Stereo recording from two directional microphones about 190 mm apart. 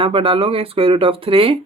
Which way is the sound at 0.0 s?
30° right (ahead or behind).